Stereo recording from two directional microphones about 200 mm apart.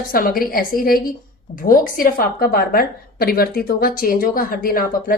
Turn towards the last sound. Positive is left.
turn(degrees=45)  # may be behind; listen again after turning